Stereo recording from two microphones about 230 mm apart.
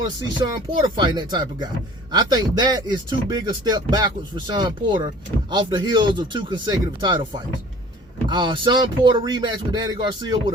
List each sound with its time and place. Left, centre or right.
0.0 s speech: centre